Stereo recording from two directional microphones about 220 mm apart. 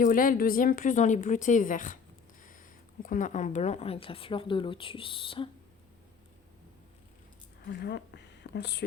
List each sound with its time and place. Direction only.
0.0 s a woman's voice: 40° left (ahead or behind)
7.7 s speech: 50° left (ahead or behind)